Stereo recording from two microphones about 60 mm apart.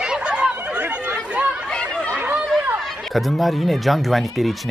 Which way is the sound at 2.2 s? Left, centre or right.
Right.